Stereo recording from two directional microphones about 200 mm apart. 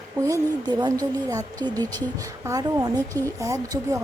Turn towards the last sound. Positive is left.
turn(degrees=-15)  # may be behind; listen again after turning